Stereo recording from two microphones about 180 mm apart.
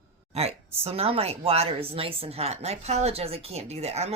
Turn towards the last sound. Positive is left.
turn(degrees=-35)  # may be behind; listen again after turning